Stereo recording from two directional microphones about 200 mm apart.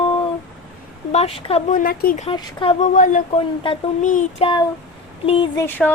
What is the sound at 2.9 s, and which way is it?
Child singing, 40° left (ahead or behind).